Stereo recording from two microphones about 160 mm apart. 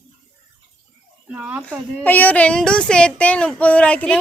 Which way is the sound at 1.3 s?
10° right (ahead or behind).